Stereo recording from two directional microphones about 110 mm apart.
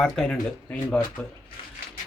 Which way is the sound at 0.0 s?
5° left (ahead or behind).